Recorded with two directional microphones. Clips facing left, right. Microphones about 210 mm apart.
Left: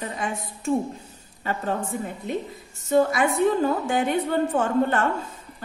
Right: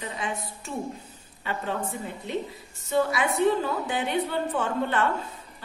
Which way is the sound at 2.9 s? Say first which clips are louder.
Left 5 dB; 45° left (ahead or behind).